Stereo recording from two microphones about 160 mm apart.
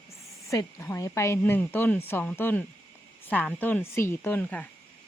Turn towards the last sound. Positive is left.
turn(degrees=10)  # may be behind; listen again after turning